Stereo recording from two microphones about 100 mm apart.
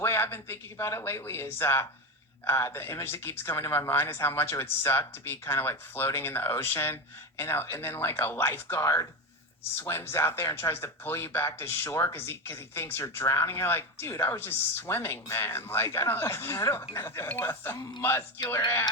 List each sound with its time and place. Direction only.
0.0 s speech: 25° left (ahead or behind)